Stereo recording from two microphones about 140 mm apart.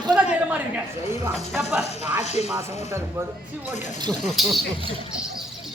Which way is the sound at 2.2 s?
50° left (ahead or behind).